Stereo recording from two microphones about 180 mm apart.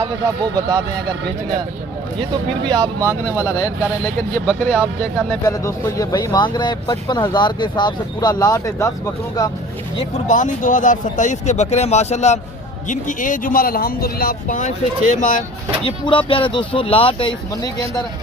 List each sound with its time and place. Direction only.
2.6 s speech: 20° right (ahead or behind)
3.3 s speech: 15° left (ahead or behind)
4.4 s speech: 5° left (ahead or behind)
5.5 s speech: 20° left (ahead or behind)
10.2 s speech: 45° left (ahead or behind)
15.8 s speech: 30° left (ahead or behind)